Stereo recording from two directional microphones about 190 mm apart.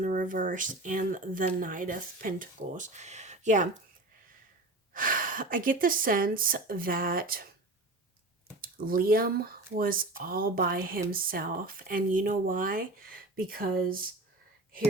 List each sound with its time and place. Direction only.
0.0 s speech: 45° right (ahead or behind)
4.9 s speech: 45° right (ahead or behind)
8.6 s speech: 50° right (ahead or behind)